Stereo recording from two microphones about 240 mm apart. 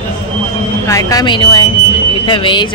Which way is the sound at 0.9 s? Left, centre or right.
Centre.